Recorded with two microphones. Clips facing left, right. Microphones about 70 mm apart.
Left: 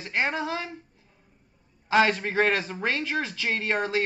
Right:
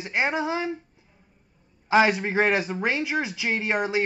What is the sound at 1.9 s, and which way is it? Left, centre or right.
A man's voice, centre.